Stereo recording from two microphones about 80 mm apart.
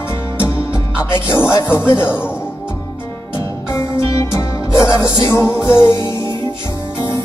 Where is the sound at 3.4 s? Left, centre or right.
Left.